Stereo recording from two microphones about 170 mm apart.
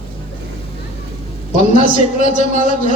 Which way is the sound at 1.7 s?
55° right (ahead or behind).